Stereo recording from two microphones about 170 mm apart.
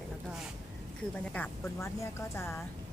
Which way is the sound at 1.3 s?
10° left (ahead or behind).